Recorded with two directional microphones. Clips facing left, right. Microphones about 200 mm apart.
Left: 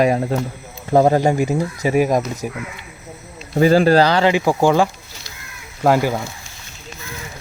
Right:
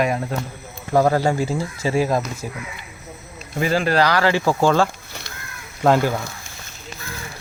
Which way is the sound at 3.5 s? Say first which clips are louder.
Left 7 dB; 35° left (ahead or behind).